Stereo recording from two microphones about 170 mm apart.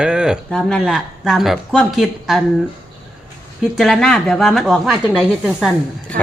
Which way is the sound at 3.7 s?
Centre (ahead or behind).